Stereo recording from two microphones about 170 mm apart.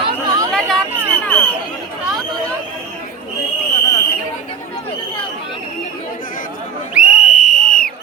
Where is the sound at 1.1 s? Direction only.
10° left (ahead or behind).